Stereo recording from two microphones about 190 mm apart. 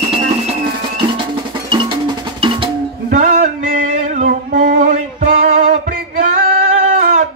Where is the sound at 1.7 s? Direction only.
25° right (ahead or behind).